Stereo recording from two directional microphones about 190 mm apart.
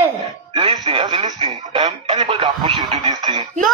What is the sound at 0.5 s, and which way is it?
Speech, 25° right (ahead or behind).